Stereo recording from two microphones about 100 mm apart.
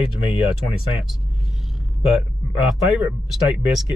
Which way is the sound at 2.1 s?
5° right (ahead or behind).